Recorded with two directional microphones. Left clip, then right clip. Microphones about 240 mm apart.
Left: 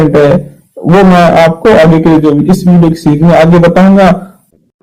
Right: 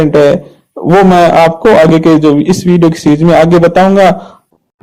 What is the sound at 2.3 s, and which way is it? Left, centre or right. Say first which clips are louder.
A man's voice: even; right.